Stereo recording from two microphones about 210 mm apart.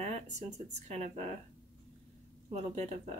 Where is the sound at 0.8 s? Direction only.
30° right (ahead or behind).